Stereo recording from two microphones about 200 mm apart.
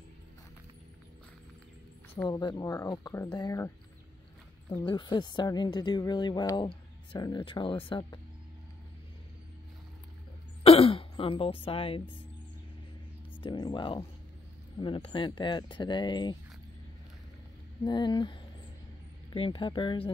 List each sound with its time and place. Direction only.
2.2 s speech: 20° left (ahead or behind)
10.6 s a sound: 30° left (ahead or behind)
13.4 s speech: 20° left (ahead or behind)
17.8 s speech: 20° left (ahead or behind)